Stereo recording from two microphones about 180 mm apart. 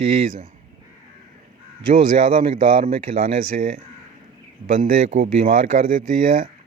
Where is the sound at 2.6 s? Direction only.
30° right (ahead or behind).